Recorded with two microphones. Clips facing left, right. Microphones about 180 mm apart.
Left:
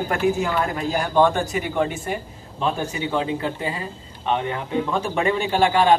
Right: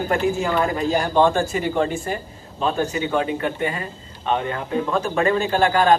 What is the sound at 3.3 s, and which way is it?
Speech, 25° left (ahead or behind).